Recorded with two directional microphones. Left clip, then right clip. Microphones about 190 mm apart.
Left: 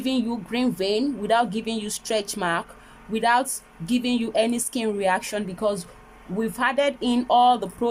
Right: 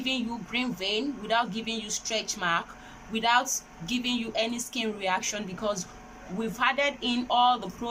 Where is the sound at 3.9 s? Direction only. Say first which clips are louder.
Left 5 dB; 30° left (ahead or behind).